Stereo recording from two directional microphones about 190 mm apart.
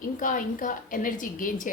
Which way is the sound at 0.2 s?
45° left (ahead or behind).